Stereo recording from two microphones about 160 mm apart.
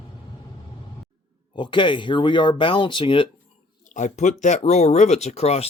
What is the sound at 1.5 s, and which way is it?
Speech, 30° left (ahead or behind).